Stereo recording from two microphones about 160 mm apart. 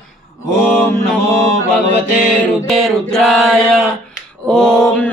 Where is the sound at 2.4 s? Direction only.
Centre (ahead or behind).